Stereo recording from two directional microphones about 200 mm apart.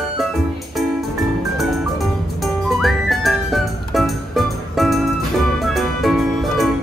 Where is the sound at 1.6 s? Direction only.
Centre (ahead or behind).